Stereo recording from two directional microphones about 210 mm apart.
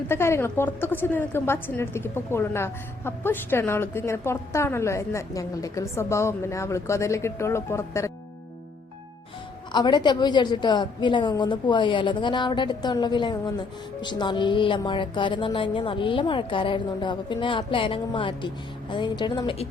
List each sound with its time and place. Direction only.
0.1 s a woman's voice: 10° left (ahead or behind)
9.7 s a woman's voice: 20° left (ahead or behind)